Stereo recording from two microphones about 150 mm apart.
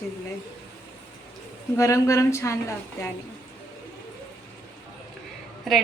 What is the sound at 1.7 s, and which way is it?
A woman's voice, 20° left (ahead or behind).